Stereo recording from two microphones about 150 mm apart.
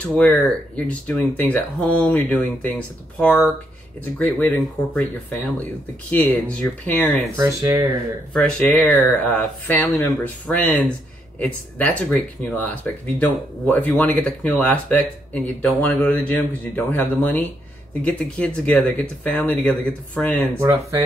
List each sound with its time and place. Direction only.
0.0 s speech: 10° left (ahead or behind)
7.3 s speech: 20° right (ahead or behind)
8.3 s speech: 10° left (ahead or behind)
20.5 s speech: 15° right (ahead or behind)